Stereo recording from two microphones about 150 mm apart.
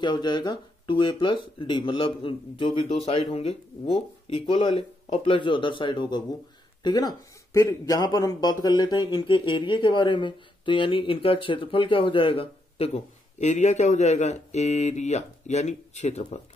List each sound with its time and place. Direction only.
0.0 s speech: 30° left (ahead or behind); by 16.3 s 45° left (ahead or behind)